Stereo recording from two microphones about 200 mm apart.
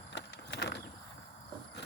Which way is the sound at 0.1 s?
55° left (ahead or behind).